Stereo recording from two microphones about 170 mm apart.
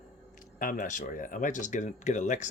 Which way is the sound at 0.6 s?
50° left (ahead or behind).